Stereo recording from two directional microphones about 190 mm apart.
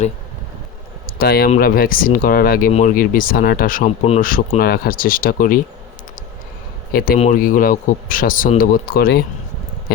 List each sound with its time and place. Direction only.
1.0 s a sound: 55° left (ahead or behind)
1.5 s speech: 50° left (ahead or behind)
6.9 s speech: 50° left (ahead or behind)